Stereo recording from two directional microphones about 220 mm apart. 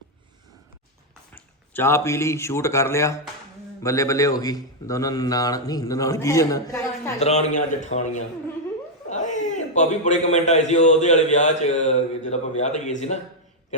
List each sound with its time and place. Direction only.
1.3 s a man's voice: 10° left (ahead or behind)
7.2 s a man's voice: 30° left (ahead or behind)
9.0 s chuckle: 35° left (ahead or behind)
9.7 s a man's voice: 35° left (ahead or behind)